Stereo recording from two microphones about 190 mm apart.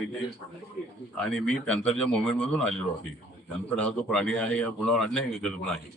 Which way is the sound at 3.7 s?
5° left (ahead or behind).